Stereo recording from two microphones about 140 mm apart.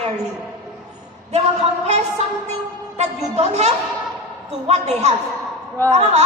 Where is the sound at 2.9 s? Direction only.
50° right (ahead or behind).